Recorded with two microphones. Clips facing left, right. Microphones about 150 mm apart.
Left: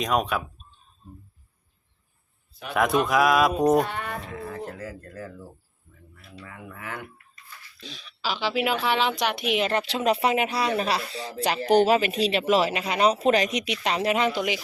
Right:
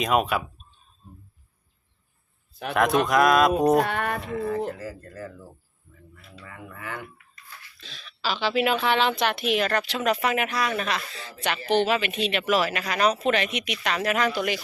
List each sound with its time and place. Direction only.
0.0 s speech: 5° right (ahead or behind)
2.7 s speech: centre (ahead or behind)
3.8 s music: 70° right (ahead or behind)
4.8 s speech: centre (ahead or behind)
7.8 s speech: 15° left (ahead or behind)